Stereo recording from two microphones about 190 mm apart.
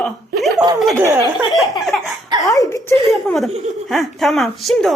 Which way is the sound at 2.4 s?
20° left (ahead or behind).